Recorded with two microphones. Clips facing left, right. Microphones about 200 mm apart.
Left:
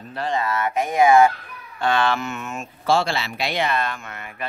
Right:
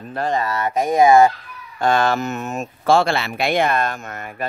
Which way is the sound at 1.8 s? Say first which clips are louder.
Right 3 dB; 45° right (ahead or behind).